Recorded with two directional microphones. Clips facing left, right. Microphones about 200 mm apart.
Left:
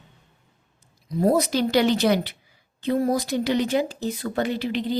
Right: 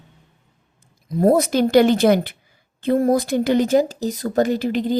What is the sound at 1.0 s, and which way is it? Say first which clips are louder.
Speech: right 4 dB; 50° right (ahead or behind).